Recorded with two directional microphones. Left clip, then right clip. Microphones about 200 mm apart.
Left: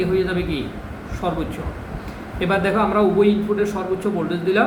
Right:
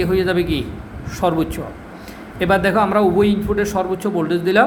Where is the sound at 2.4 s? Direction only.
55° right (ahead or behind).